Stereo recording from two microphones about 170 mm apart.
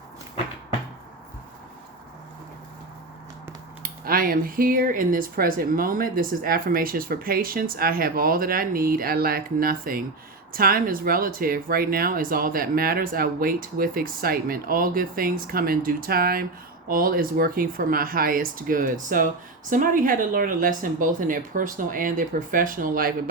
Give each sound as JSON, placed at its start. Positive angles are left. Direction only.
{"t": 3.8, "sound": "speech", "side_deg": -55}